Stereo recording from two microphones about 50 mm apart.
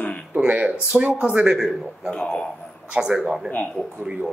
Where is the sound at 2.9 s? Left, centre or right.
Centre.